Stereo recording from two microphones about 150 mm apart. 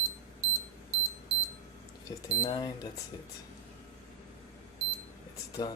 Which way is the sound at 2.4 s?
30° left (ahead or behind).